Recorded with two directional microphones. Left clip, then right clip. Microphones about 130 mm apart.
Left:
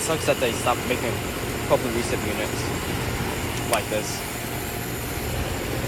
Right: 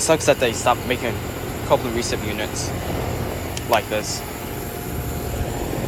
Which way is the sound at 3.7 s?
20° right (ahead or behind).